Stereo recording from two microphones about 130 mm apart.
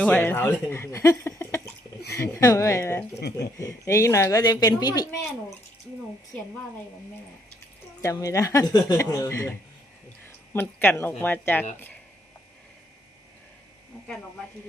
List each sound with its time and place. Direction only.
0.0 s speech: 10° left (ahead or behind); by 5.0 s 30° left (ahead or behind)
8.0 s speech: 25° left (ahead or behind)